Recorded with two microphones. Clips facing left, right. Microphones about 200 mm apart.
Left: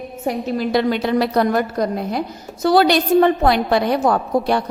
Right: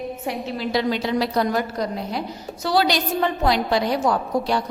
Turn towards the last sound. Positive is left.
turn(degrees=55)  # may be behind; listen again after turning